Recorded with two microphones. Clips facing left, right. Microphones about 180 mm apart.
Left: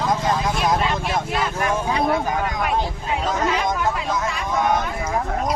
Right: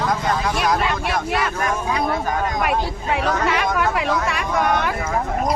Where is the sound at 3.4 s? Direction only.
80° right.